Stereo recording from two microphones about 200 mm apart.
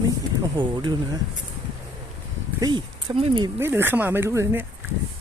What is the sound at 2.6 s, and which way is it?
Speech, 25° right (ahead or behind).